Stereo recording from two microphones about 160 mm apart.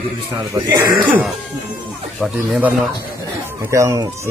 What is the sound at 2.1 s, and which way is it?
Speech, centre (ahead or behind).